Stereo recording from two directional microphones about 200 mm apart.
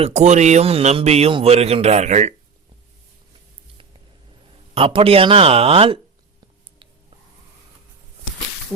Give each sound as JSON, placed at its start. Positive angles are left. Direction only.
{"t": 0.0, "sound": "a man's voice", "side_deg": -35}
{"t": 4.7, "sound": "speech", "side_deg": -25}